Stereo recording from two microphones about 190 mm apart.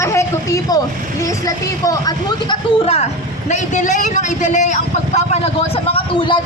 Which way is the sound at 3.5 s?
40° left (ahead or behind).